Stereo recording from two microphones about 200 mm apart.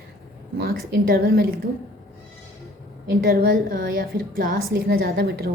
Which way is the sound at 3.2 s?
50° right (ahead or behind).